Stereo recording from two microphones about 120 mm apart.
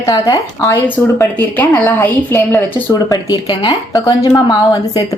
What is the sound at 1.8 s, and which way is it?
A woman's voice, 15° left (ahead or behind).